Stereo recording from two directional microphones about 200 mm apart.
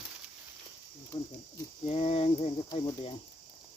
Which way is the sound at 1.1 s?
25° left (ahead or behind).